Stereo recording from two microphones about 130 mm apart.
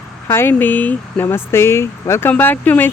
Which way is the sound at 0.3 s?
15° left (ahead or behind).